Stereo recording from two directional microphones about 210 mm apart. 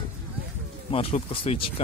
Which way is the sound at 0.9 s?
25° left (ahead or behind).